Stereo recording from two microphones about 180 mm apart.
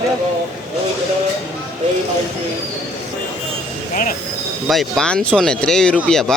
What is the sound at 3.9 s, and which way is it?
Train wheels squealing, 50° left (ahead or behind).